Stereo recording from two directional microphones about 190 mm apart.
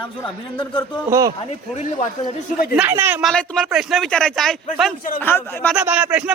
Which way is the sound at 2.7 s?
10° right (ahead or behind).